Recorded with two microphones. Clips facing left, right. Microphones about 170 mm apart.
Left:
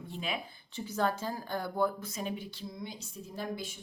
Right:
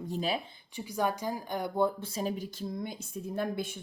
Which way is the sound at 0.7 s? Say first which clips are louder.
Even; 15° right (ahead or behind).